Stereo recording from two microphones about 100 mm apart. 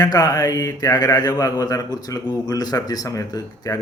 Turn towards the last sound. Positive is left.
turn(degrees=35)  # may be behind; listen again after turning